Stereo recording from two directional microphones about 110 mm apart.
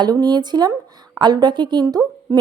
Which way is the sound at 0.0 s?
40° right (ahead or behind).